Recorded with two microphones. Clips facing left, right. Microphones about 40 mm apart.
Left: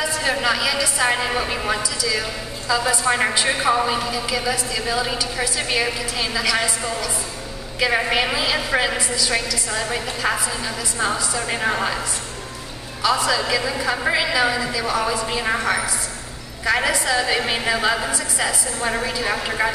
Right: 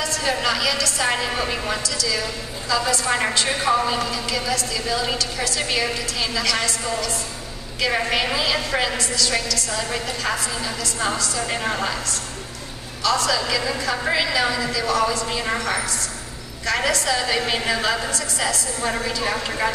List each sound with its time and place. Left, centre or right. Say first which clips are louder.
0.0 s a woman's voice: left 2 dB; centre